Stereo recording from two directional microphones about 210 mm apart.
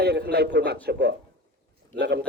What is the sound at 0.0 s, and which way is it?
A man's voice, 50° right (ahead or behind).